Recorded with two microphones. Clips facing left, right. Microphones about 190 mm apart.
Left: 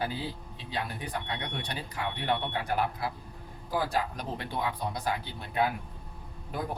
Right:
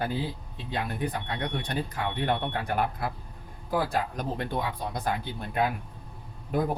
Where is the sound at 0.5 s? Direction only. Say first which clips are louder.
Right 5 dB; 50° right (ahead or behind).